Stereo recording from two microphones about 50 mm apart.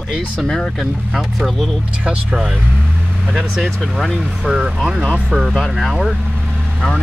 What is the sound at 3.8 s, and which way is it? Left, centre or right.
Speech, centre.